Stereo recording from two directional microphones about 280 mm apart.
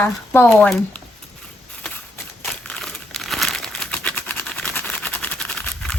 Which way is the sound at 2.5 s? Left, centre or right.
Centre.